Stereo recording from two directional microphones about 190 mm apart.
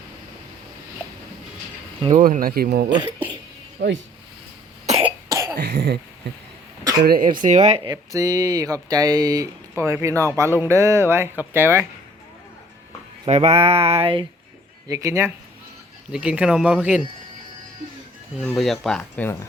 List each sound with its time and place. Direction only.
2.0 s speech: 40° right (ahead or behind)
3.8 s cough: 60° right (ahead or behind)
4.9 s cough: 30° right (ahead or behind)
5.3 s cough: 15° right (ahead or behind)
5.5 s cough: 60° right (ahead or behind)
7.0 s speech: 50° right (ahead or behind)
7.9 s speech: 20° right (ahead or behind)
13.2 s a sound: 35° right (ahead or behind)
14.8 s speech: 15° right (ahead or behind)
18.4 s speech: centre (ahead or behind)